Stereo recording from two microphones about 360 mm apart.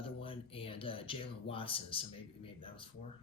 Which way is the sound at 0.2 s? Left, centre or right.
Centre.